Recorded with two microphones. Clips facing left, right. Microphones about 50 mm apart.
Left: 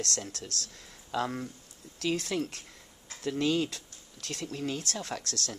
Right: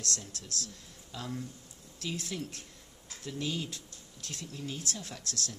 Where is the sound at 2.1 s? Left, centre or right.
Left.